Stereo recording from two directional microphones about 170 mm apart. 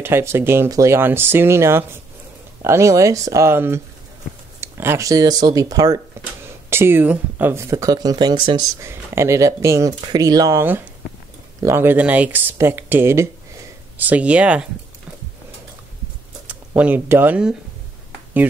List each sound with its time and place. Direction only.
0.0 s speech: 15° right (ahead or behind)
6.2 s a sound: 15° right (ahead or behind)
6.7 s speech: 15° right (ahead or behind)
16.4 s speech: 10° right (ahead or behind)